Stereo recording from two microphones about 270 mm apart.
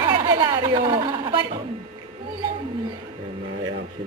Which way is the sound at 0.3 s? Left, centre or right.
Centre.